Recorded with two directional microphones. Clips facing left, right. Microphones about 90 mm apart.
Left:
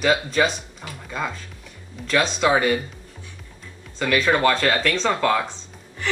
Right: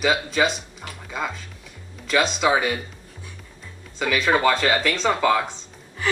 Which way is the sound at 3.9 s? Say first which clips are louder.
Left 1 dB; 5° right (ahead or behind).